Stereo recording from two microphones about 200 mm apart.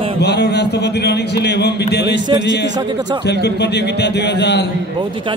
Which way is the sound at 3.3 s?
55° left (ahead or behind).